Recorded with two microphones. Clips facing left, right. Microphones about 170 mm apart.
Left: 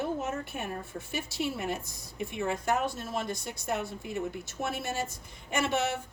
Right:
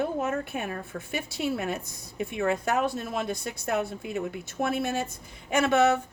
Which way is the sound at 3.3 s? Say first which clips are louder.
Right 5 dB; 60° right (ahead or behind).